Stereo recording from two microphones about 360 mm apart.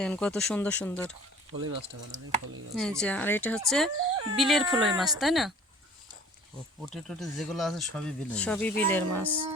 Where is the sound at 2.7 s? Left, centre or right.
Centre.